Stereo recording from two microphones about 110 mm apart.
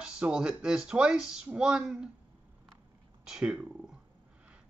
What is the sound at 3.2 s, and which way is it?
Speech, 5° right (ahead or behind).